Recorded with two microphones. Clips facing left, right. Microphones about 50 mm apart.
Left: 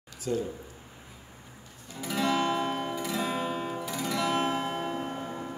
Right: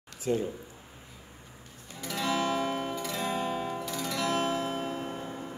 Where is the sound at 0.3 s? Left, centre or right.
Right.